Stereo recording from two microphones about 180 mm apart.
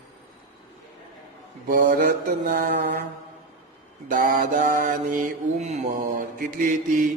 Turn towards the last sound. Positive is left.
turn(degrees=-45)  # may be behind; listen again after turning